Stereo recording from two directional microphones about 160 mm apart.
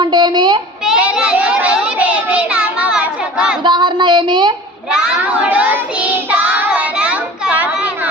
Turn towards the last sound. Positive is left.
turn(degrees=-10)  # may be behind; listen again after turning